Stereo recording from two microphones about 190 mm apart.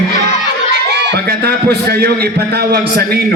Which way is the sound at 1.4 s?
55° right (ahead or behind).